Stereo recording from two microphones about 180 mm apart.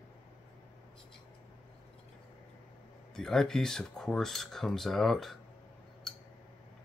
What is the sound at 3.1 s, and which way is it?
Speech, centre (ahead or behind).